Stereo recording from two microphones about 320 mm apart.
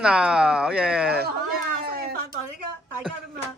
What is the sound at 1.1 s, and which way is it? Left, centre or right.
Speech, right.